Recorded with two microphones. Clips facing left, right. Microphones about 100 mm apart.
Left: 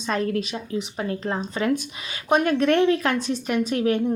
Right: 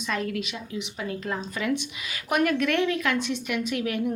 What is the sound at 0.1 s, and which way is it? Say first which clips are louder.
A woman's voice: left 5 dB; 35° left (ahead or behind).